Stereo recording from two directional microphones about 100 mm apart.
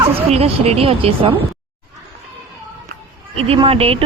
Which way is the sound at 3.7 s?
75° right (ahead or behind).